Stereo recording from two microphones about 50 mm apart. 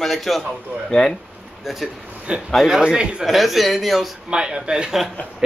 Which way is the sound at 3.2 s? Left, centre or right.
Centre.